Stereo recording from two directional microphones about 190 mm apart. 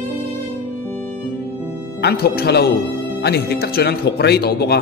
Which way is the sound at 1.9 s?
60° left (ahead or behind).